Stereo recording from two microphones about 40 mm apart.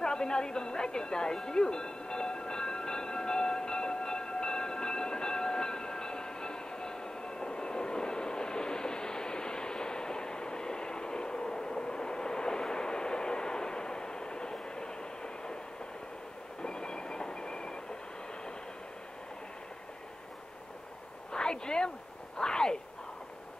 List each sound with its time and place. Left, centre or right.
0.0 s music: centre
16.6 s train: centre
21.3 s a sound: centre